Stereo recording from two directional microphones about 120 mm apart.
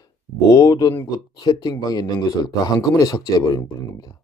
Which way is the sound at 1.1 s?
35° left (ahead or behind).